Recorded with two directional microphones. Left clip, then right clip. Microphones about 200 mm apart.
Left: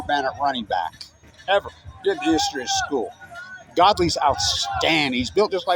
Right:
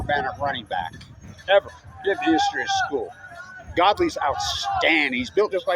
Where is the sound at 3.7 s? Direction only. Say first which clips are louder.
Left 2 dB; 30° left (ahead or behind).